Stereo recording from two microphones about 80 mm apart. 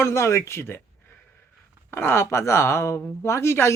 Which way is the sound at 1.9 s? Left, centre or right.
Left.